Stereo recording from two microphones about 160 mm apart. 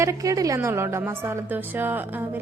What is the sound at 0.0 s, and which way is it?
A woman's voice, 20° right (ahead or behind).